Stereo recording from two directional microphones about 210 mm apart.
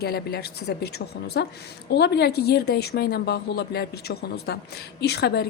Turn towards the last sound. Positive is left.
turn(degrees=50)  # may be behind; listen again after turning